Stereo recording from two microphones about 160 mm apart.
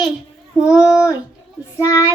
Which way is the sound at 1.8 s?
15° left (ahead or behind).